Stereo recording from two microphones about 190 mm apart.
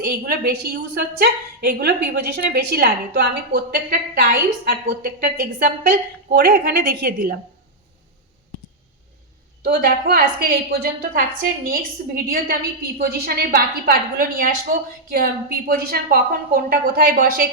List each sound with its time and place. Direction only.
0.0 s a woman's voice: 55° right (ahead or behind)
9.6 s a woman's voice: 50° right (ahead or behind)